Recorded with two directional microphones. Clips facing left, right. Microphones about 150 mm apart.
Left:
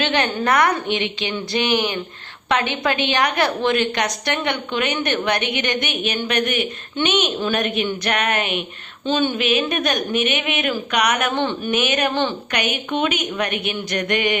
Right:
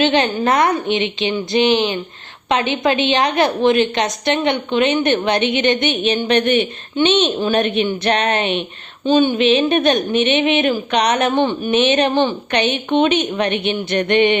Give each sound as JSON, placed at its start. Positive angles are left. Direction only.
{"t": 0.0, "sound": "a woman's voice", "side_deg": -20}
{"t": 9.0, "sound": "speech", "side_deg": -15}
{"t": 9.4, "sound": "a woman's voice", "side_deg": -25}
{"t": 11.3, "sound": "speech", "side_deg": -15}
{"t": 11.8, "sound": "a woman's voice", "side_deg": -25}